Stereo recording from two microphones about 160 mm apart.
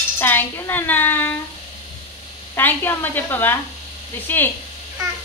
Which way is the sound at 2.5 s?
15° left (ahead or behind).